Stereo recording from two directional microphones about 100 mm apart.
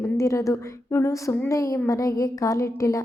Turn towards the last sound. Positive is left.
turn(degrees=35)  # may be behind; listen again after turning